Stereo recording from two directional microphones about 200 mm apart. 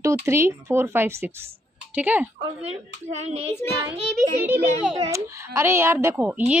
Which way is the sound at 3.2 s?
30° right (ahead or behind).